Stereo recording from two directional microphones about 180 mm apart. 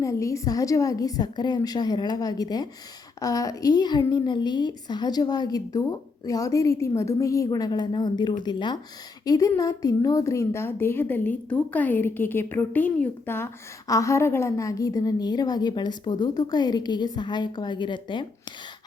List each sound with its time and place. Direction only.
0.0 s a woman's voice: 15° left (ahead or behind)